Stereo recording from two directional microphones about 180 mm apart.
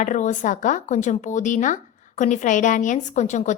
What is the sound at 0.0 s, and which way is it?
Speech, 45° left (ahead or behind).